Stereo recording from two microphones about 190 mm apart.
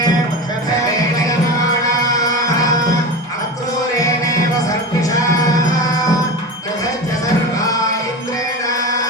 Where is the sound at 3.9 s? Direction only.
15° left (ahead or behind).